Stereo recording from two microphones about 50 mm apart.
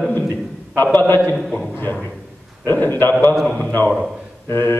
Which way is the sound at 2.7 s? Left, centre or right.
Left.